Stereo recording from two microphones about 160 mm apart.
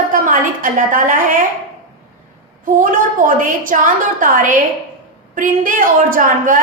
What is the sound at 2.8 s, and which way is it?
A woman's voice, 55° right (ahead or behind).